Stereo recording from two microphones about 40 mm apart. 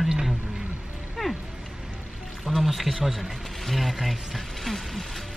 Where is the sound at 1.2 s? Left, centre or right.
Centre.